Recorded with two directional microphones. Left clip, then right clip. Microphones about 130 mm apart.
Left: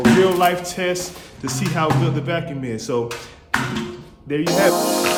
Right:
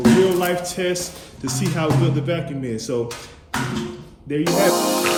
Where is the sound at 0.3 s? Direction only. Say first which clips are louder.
Left 3 dB; 50° left (ahead or behind).